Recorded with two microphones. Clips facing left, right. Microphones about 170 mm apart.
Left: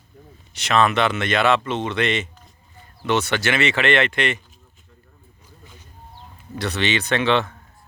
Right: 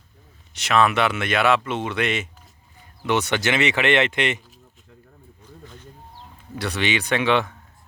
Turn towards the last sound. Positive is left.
turn(degrees=-10)  # may be behind; listen again after turning